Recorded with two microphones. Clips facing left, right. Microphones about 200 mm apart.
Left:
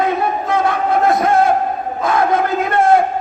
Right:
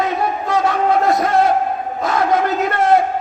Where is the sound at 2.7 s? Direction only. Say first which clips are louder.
Left 3 dB; 50° left (ahead or behind).